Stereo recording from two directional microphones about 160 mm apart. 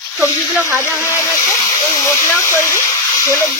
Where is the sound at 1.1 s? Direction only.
15° left (ahead or behind).